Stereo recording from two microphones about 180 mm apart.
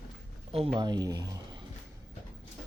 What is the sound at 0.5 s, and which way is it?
Speech, 30° right (ahead or behind).